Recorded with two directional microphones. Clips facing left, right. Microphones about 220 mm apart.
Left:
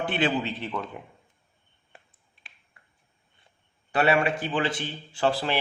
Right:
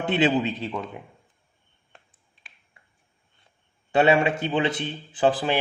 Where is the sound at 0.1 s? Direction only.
20° right (ahead or behind).